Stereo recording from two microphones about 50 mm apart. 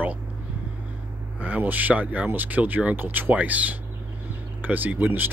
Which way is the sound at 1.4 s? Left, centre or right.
Right.